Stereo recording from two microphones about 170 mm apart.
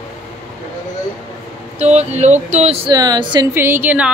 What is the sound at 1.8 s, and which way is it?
Speech, 40° right (ahead or behind).